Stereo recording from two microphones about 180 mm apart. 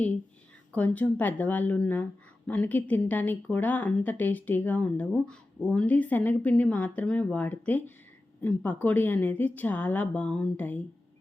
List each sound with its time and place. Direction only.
0.7 s a woman's voice: 10° left (ahead or behind)